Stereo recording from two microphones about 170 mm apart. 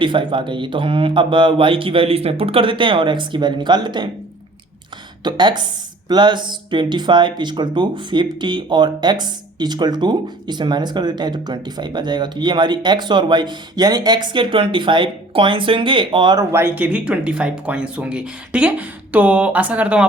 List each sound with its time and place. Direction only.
0.0 s speech: 30° right (ahead or behind)
5.2 s speech: 25° right (ahead or behind); by 20.1 s 5° right (ahead or behind)